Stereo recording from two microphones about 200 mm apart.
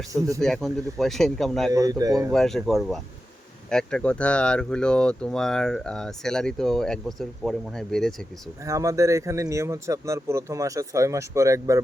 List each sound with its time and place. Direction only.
0.1 s speech: 15° right (ahead or behind)
0.4 s speech: centre (ahead or behind)
1.7 s speech: 15° right (ahead or behind)
2.3 s speech: centre (ahead or behind)
8.6 s speech: 15° right (ahead or behind)